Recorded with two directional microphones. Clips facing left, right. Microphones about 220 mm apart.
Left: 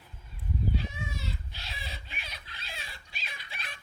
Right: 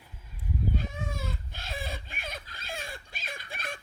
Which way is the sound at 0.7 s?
50° right (ahead or behind).